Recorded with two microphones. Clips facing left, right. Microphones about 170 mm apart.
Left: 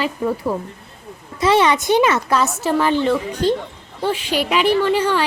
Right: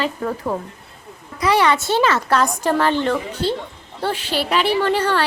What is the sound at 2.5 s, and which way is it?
Speech, 5° left (ahead or behind).